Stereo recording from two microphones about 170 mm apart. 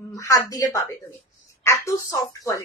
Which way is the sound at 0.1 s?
20° left (ahead or behind).